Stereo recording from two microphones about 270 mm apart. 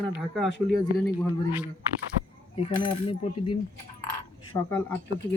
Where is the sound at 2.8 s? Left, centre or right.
Centre.